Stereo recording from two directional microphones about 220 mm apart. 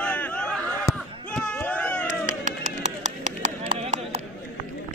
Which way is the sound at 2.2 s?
35° right (ahead or behind).